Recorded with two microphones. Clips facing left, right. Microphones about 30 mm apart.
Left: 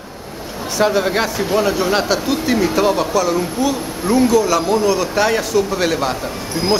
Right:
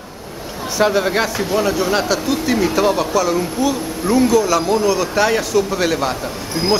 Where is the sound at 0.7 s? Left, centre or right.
Centre.